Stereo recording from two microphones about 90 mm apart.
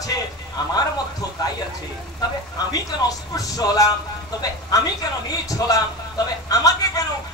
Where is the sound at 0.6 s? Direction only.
50° left (ahead or behind).